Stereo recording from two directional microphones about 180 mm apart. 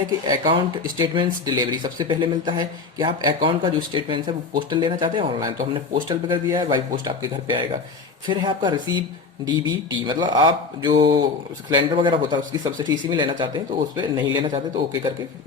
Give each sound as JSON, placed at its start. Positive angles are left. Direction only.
{"t": 0.3, "sound": "speech", "side_deg": -25}